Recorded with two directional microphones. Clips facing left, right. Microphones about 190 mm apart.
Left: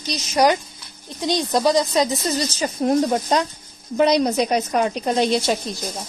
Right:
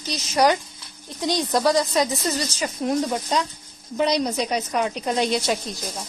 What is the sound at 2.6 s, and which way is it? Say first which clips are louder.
A woman's voice: left 5 dB; 45° left (ahead or behind).